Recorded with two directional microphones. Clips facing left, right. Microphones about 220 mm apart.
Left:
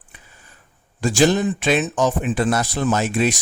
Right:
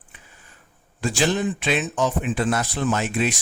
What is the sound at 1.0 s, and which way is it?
Speech, 40° left (ahead or behind).